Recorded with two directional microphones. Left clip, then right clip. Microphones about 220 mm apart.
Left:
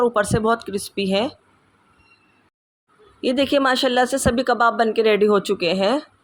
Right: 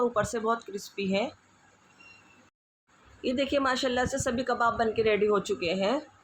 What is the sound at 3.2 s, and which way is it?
Speech, 45° left (ahead or behind).